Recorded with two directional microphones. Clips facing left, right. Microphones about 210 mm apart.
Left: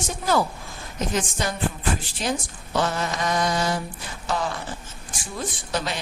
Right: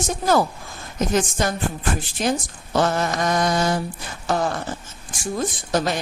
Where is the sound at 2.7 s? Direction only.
45° right (ahead or behind).